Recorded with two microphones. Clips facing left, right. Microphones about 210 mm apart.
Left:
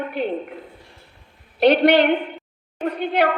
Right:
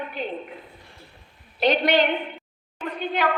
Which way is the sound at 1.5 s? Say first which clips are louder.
Left 6 dB; 65° left (ahead or behind).